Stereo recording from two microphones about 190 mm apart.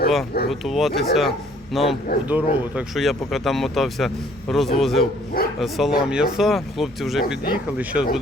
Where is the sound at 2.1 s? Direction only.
55° left (ahead or behind).